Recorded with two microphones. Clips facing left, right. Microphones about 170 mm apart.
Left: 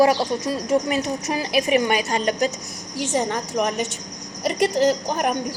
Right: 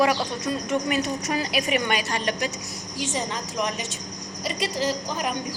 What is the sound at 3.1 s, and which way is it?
A woman's voice, 60° left (ahead or behind).